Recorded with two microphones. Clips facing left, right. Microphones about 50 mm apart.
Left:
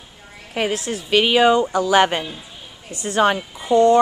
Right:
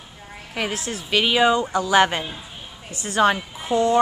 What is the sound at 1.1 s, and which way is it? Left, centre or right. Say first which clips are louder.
Speech: left 3 dB; centre.